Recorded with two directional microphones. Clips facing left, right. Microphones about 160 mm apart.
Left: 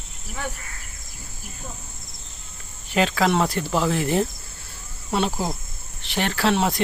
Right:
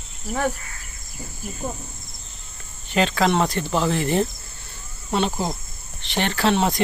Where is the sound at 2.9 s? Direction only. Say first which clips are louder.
Right 1 dB; 5° left (ahead or behind).